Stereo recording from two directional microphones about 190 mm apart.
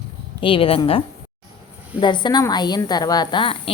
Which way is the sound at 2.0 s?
25° left (ahead or behind).